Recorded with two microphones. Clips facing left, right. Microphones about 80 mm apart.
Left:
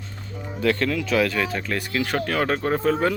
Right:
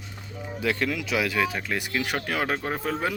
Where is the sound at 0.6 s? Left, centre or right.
Centre.